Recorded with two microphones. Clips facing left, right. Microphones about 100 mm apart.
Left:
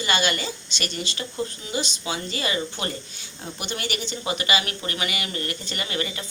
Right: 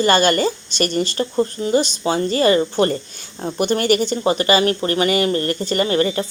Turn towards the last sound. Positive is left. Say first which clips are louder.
# right 12 dB
turn(degrees=-40)  # may be behind; listen again after turning